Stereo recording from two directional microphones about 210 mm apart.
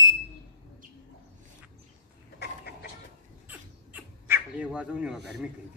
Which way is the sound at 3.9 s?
5° right (ahead or behind).